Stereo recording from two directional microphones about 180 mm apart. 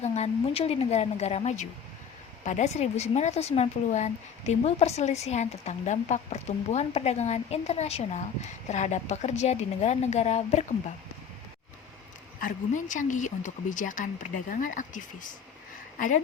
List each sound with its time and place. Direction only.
0.0 s speech: 35° left (ahead or behind)
12.4 s speech: 45° left (ahead or behind)